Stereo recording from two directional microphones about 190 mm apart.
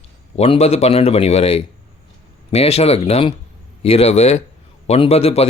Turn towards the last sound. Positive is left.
turn(degrees=35)  # may be behind; listen again after turning